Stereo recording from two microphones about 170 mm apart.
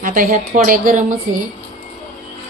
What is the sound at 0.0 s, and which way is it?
A woman's voice, 55° right (ahead or behind).